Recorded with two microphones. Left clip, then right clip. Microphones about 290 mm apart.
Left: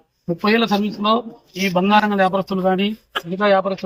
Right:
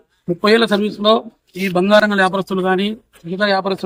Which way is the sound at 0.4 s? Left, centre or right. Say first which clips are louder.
Right 4 dB; centre.